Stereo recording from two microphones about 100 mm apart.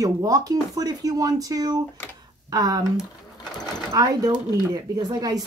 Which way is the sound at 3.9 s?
40° right (ahead or behind).